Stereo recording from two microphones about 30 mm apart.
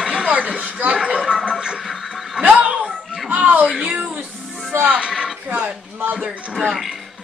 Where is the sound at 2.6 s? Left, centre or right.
Right.